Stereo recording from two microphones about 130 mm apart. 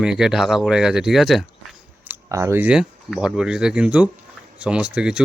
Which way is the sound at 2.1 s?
20° right (ahead or behind).